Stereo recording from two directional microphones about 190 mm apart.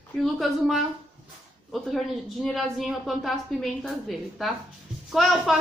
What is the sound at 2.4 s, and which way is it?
A woman's voice, centre (ahead or behind).